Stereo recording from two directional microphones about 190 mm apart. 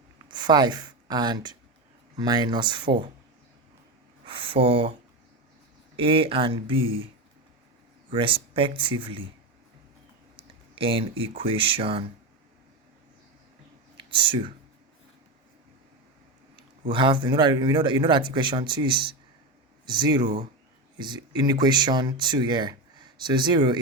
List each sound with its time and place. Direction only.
0.3 s speech: 25° right (ahead or behind)
4.3 s speech: 30° right (ahead or behind)
6.0 s speech: 30° right (ahead or behind)
8.1 s speech: 25° right (ahead or behind)
10.3 s speech: 30° right (ahead or behind)
13.9 s a sound: 25° right (ahead or behind)
16.9 s speech: 25° right (ahead or behind)